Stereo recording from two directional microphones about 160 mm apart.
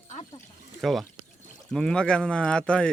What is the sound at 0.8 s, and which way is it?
Speech, centre (ahead or behind).